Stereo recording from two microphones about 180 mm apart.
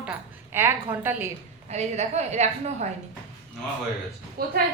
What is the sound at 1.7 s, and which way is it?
A woman's voice, 40° right (ahead or behind).